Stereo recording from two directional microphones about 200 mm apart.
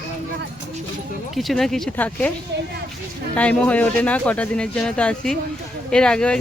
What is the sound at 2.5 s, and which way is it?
Speech, 55° right (ahead or behind).